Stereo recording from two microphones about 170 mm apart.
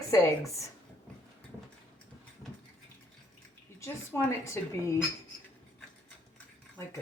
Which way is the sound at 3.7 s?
15° left (ahead or behind).